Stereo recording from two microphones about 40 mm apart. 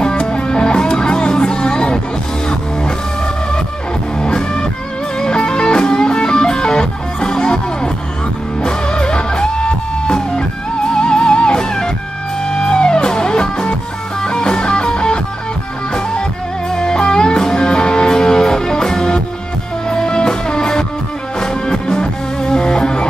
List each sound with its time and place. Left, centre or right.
0.0 s music: left
4.2 s music: left
16.7 s music: centre